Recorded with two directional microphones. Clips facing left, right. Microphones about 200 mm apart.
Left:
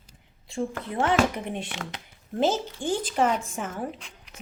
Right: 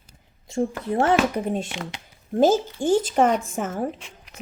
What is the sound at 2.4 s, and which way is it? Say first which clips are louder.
Speech: right 6 dB; 45° right (ahead or behind).